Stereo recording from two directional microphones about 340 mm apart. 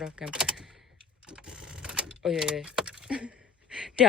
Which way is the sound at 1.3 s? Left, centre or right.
Centre.